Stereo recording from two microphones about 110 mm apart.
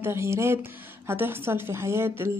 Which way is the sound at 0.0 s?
25° right (ahead or behind).